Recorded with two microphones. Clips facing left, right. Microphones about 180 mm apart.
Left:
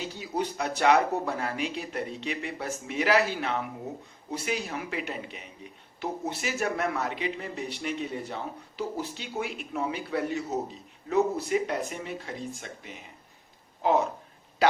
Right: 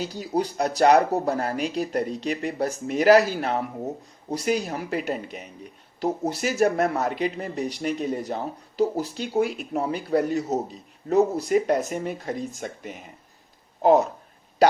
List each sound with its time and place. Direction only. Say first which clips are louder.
0.0 s speech: right 5 dB; 40° right (ahead or behind)